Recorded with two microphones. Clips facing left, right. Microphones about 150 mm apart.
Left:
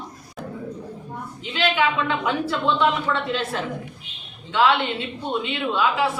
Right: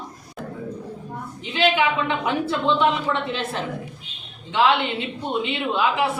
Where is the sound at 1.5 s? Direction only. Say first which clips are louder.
Right 2 dB; 20° right (ahead or behind).